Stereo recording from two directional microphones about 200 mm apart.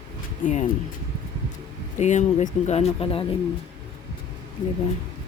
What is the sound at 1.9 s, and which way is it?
Speech, 35° left (ahead or behind).